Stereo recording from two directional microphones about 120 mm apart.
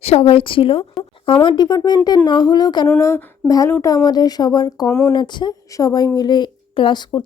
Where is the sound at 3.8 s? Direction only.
30° left (ahead or behind).